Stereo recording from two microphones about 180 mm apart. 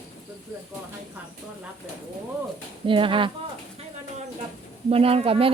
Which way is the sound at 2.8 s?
30° right (ahead or behind).